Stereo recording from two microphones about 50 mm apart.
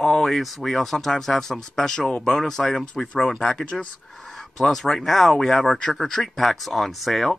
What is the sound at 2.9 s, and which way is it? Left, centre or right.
Speech, left.